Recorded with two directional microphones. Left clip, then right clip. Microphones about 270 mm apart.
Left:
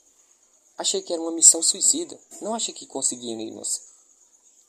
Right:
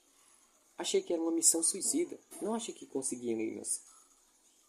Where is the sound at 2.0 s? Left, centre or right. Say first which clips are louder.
Left 7 dB; centre.